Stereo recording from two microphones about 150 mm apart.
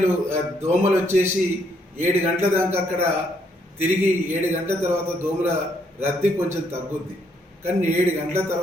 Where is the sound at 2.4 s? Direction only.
15° right (ahead or behind).